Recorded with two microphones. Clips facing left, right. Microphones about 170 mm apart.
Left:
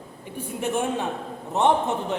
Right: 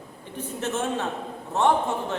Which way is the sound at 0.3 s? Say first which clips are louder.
Left 2 dB; 15° left (ahead or behind).